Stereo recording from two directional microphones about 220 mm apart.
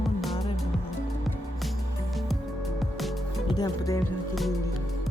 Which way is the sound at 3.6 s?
15° left (ahead or behind).